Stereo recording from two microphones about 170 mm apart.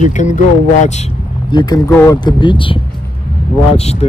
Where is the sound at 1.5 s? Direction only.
25° left (ahead or behind).